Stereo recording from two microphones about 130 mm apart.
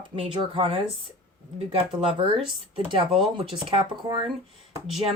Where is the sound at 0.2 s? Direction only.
45° right (ahead or behind).